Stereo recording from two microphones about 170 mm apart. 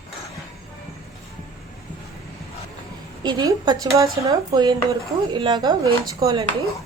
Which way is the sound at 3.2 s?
25° right (ahead or behind).